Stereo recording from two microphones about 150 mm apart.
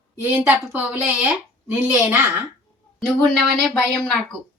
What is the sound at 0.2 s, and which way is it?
A woman's voice, 10° right (ahead or behind).